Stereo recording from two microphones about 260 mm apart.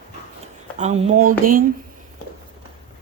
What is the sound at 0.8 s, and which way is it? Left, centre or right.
Speech, right.